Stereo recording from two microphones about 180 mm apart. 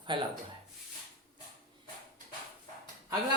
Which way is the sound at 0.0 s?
25° right (ahead or behind).